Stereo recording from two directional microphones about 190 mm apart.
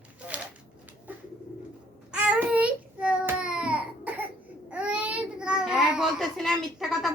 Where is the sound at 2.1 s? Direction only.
5° right (ahead or behind).